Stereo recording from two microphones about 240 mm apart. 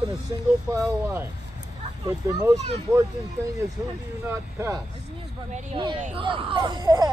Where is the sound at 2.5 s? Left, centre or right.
Right.